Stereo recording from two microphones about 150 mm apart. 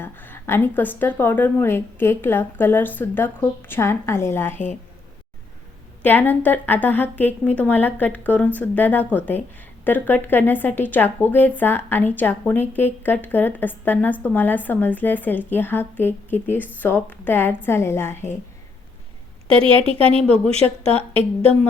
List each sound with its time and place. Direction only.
0.0 s a woman's voice: 15° left (ahead or behind)
6.0 s a woman's voice: 10° left (ahead or behind)
19.5 s speech: 35° right (ahead or behind)